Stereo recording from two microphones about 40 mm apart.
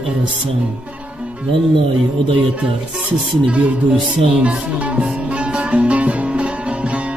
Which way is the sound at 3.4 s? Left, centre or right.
Right.